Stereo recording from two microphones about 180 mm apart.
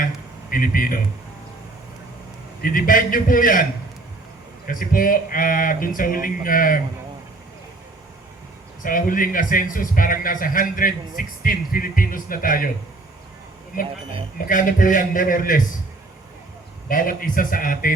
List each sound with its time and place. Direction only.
0.5 s a man's voice: 50° left (ahead or behind)
2.6 s a man's voice: 50° left (ahead or behind)
8.8 s a man's voice: 50° left (ahead or behind)
14.3 s a man's voice: 50° left (ahead or behind)
16.9 s a man's voice: 50° left (ahead or behind)